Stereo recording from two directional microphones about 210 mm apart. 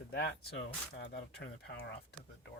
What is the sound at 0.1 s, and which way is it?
Speech, 50° left (ahead or behind).